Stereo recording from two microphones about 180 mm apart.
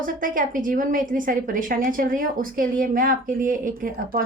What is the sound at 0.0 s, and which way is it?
A woman's voice, 50° right (ahead or behind).